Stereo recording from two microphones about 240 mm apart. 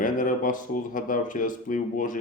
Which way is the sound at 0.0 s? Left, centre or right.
Left.